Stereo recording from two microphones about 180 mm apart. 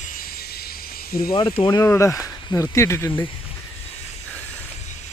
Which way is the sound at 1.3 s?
25° left (ahead or behind).